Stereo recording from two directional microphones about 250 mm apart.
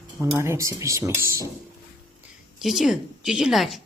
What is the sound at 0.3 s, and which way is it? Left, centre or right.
Speech, centre.